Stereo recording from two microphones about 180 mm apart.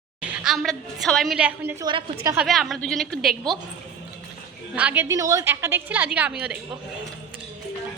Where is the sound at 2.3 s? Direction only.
5° right (ahead or behind).